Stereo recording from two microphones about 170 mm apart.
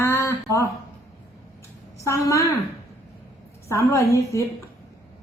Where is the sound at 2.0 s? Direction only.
20° left (ahead or behind).